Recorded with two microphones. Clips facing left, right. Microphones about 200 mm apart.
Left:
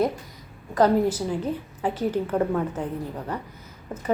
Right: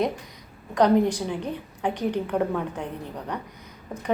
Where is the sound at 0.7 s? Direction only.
5° left (ahead or behind).